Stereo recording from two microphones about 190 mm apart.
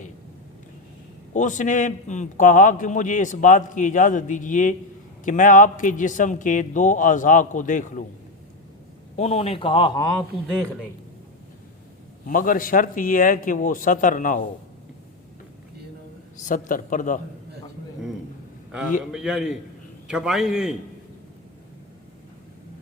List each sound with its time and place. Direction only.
1.3 s a man's voice: 40° left (ahead or behind)
9.1 s a man's voice: 35° left (ahead or behind); by 10.2 s 20° left (ahead or behind)
12.3 s a man's voice: 45° left (ahead or behind)
16.4 s a man's voice: 45° left (ahead or behind)
19.1 s a man's voice: 5° right (ahead or behind)